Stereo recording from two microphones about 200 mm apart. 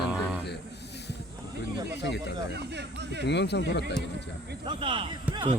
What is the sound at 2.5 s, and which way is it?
Speech, 60° right (ahead or behind).